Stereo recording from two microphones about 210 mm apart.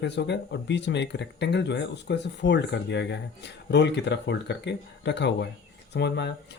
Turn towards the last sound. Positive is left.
turn(degrees=55)  # may be behind; listen again after turning